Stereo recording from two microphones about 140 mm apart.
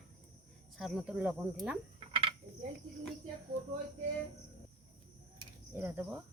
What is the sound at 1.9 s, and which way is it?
Frog, 40° right (ahead or behind).